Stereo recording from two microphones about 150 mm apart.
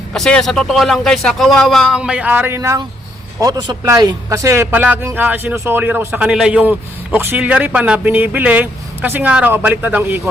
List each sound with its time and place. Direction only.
0.1 s a man's voice: 5° left (ahead or behind); by 10.2 s 15° right (ahead or behind)